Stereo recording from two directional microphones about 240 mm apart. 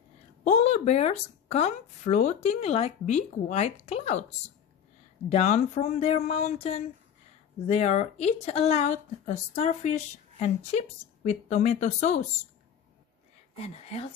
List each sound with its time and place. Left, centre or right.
0.4 s a woman's voice: left
5.3 s a woman's voice: left
13.6 s a woman's voice: left